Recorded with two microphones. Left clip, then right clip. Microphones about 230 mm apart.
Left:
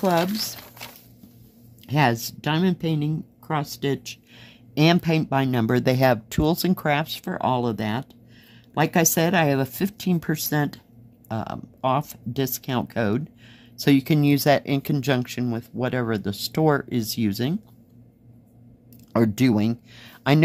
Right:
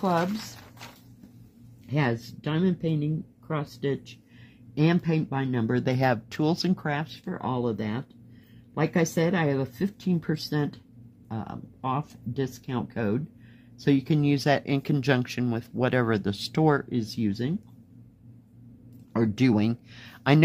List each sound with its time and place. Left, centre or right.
0.0 s speech: left
1.9 s speech: left
5.9 s speech: centre
19.1 s speech: left
19.4 s speech: centre